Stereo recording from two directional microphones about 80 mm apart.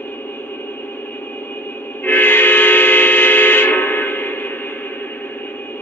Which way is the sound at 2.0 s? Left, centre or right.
Left.